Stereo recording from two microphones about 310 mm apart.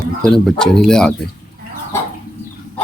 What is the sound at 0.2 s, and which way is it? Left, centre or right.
Speech, centre.